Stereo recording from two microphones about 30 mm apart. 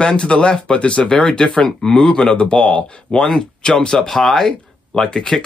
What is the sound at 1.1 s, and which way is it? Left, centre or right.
Speech, left.